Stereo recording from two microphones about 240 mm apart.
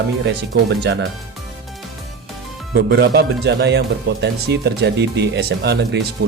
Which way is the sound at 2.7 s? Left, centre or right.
Right.